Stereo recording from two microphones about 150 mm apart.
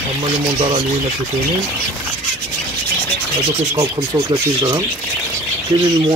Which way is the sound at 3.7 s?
25° right (ahead or behind).